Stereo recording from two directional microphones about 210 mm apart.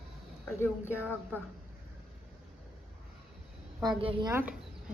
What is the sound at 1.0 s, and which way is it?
Speech, 10° right (ahead or behind).